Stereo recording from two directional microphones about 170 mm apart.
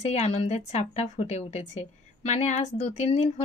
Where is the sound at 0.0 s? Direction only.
40° left (ahead or behind).